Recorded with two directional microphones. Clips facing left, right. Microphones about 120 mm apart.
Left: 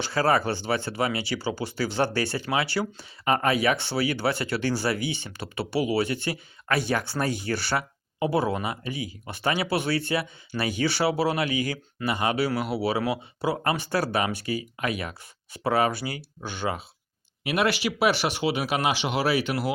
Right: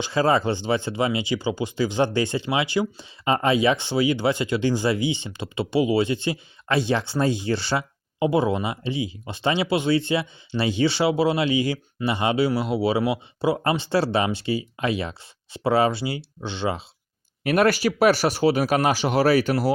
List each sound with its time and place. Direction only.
0.0 s speech: 20° right (ahead or behind)
17.4 s speech: 45° right (ahead or behind)